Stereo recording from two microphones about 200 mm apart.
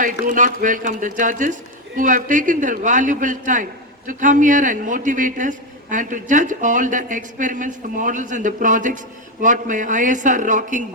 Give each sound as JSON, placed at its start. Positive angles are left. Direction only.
{"t": 0.0, "sound": "a man's voice", "side_deg": -40}